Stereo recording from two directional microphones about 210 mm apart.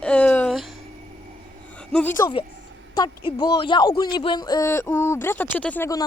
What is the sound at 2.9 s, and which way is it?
Speech, 20° left (ahead or behind).